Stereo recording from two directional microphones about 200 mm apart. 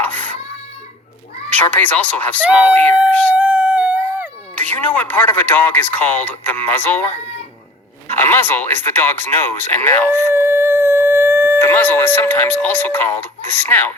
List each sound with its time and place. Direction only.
0.0 s a sound: 10° left (ahead or behind)
1.6 s speech: 10° left (ahead or behind)
3.3 s a sound: 5° right (ahead or behind)
4.5 s speech: 10° left (ahead or behind)
8.3 s speech: 10° left (ahead or behind)
10.3 s howl: 10° right (ahead or behind)
11.6 s speech: 10° left (ahead or behind)